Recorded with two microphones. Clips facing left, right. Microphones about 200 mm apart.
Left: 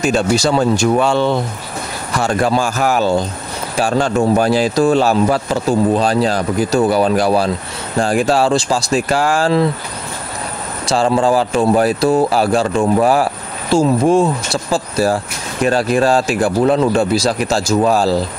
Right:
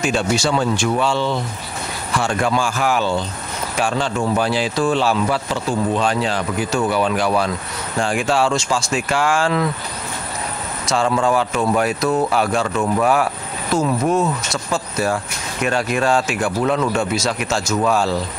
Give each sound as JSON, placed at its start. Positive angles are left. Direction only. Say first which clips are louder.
{"t": 0.0, "sound": "speech", "louder": "left 4 dB", "side_deg": 40}
{"t": 2.1, "sound": "speech", "louder": "left 4 dB", "side_deg": 35}
{"t": 10.9, "sound": "speech", "louder": "left 4 dB", "side_deg": 30}